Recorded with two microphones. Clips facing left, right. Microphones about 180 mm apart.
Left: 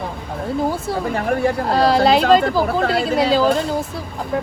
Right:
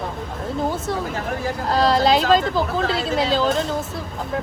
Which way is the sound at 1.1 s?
65° left (ahead or behind).